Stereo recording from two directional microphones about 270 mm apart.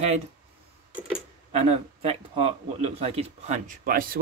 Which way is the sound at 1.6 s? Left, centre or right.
Right.